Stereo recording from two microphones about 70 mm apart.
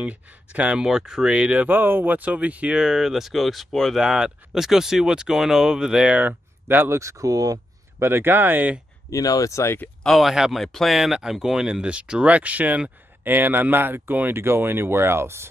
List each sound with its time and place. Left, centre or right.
0.0 s speech: right
0.8 s speech: centre
1.3 s speech: centre
4.0 s speech: centre
6.1 s speech: right
6.9 s speech: right
8.0 s speech: right
9.1 s speech: left
10.0 s speech: centre; by 15.4 s right